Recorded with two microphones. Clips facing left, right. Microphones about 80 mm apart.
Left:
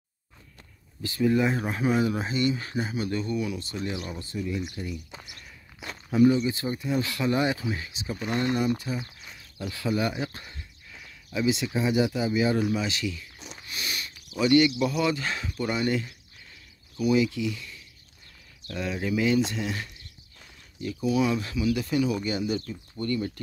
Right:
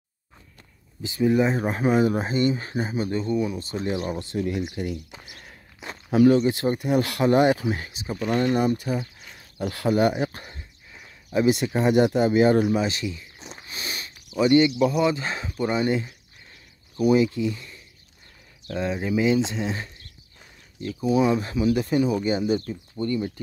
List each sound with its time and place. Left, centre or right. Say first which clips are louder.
1.0 s speech: right 3 dB; centre; by 4.2 s right
4.2 s speech: right 5 dB; right
5.2 s speech: right 2 dB; right
6.0 s speech: right 3 dB; right
6.4 s speech: right 6 dB; right
9.6 s speech: right 6 dB; right
10.5 s a sound: right 1 dB; right
11.3 s speech: right 5 dB; right
12.7 s speech: right 4 dB; right
16.9 s speech: right 4 dB; right
21.0 s speech: right 4 dB; right
22.9 s speech: right 3 dB; centre